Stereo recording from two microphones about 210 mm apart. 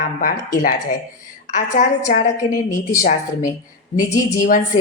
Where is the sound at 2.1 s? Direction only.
35° left (ahead or behind).